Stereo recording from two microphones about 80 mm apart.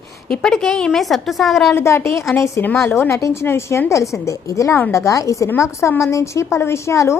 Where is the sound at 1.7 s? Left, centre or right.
Left.